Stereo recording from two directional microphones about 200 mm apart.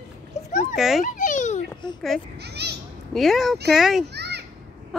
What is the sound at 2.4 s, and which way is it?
Children playing, 55° right (ahead or behind).